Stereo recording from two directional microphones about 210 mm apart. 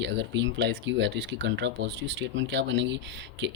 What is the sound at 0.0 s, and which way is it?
Speech, 55° right (ahead or behind).